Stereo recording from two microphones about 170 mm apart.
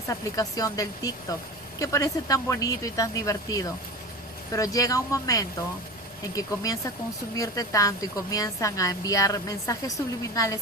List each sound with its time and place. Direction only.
0.1 s a woman's voice: 20° left (ahead or behind)